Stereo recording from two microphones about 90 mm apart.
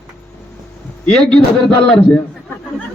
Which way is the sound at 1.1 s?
5° left (ahead or behind).